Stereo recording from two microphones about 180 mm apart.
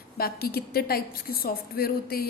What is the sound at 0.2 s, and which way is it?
A woman's voice, 60° left (ahead or behind).